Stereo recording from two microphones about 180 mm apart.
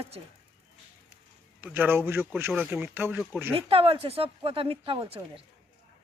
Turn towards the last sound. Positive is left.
turn(degrees=-30)  # may be behind; listen again after turning